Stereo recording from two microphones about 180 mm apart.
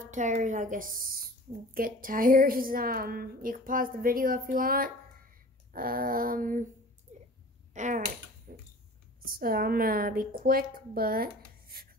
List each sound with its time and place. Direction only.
0.0 s a woman's voice: 45° right (ahead or behind)
7.1 s a sound: 40° right (ahead or behind)
7.7 s a woman's voice: 45° right (ahead or behind)
8.5 s tick-tock: 55° right (ahead or behind)
9.2 s a woman's voice: 55° right (ahead or behind)